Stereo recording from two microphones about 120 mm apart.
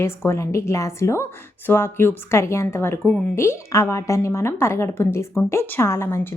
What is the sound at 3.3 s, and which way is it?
A woman's voice, 25° left (ahead or behind).